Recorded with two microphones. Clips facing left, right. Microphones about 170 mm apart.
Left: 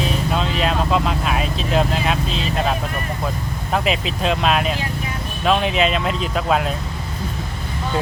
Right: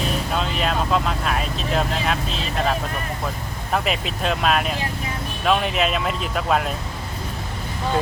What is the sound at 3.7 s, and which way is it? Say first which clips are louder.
Speech: left 2 dB; centre (ahead or behind).